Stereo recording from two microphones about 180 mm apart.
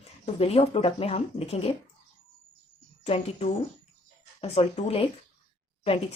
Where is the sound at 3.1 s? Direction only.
35° left (ahead or behind).